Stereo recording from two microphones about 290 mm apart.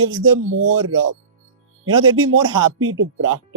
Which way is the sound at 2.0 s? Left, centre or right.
Right.